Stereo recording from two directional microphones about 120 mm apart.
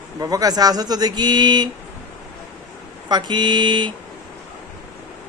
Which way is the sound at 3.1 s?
40° right (ahead or behind).